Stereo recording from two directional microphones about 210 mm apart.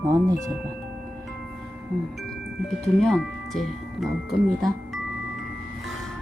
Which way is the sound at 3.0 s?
5° left (ahead or behind).